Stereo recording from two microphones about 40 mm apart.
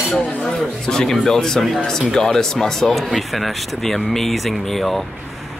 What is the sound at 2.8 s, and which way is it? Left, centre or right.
Speech, centre.